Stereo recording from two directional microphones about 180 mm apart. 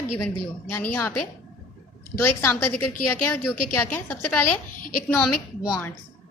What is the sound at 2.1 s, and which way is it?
A woman's voice, 15° left (ahead or behind).